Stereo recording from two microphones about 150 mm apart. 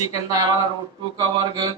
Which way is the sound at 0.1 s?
25° right (ahead or behind).